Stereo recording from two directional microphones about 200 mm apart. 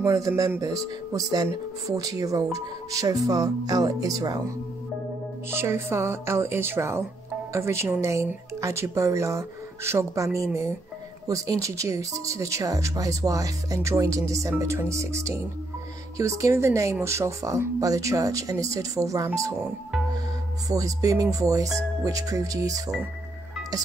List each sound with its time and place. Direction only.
0.0 s speech: 15° right (ahead or behind)
5.5 s speech: 10° right (ahead or behind)
20.6 s speech: 15° right (ahead or behind)